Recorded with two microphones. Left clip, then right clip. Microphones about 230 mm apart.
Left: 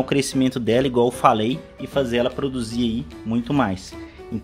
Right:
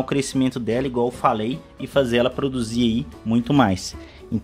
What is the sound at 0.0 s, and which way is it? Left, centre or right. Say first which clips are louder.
Speech: left 2 dB; centre.